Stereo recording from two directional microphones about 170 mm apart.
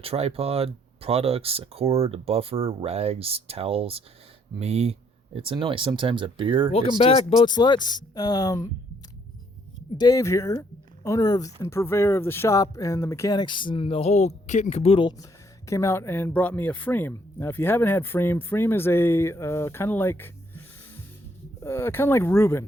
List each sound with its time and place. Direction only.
0.0 s speech: 35° right (ahead or behind)
6.7 s speech: 35° left (ahead or behind)
7.9 s music: 25° left (ahead or behind)
10.0 s speech: 20° left (ahead or behind)